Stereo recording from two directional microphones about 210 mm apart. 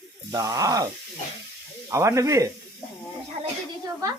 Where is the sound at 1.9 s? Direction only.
15° right (ahead or behind).